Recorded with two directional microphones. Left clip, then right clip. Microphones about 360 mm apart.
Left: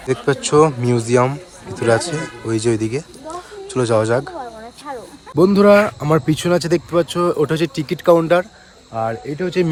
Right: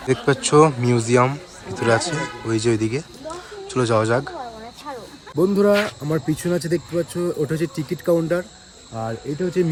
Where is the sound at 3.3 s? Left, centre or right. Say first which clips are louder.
Left 2 dB; centre.